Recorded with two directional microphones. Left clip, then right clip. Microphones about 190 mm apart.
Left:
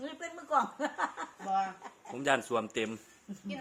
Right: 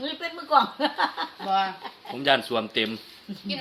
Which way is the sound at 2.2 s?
20° left (ahead or behind).